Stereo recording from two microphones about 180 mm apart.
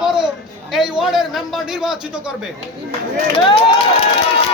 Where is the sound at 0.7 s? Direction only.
Centre (ahead or behind).